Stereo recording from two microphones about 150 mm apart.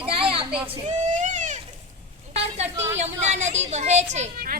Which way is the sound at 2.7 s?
15° right (ahead or behind).